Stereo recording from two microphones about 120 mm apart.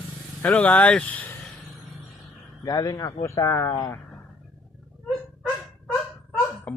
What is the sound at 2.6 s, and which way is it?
A man's voice, 30° left (ahead or behind).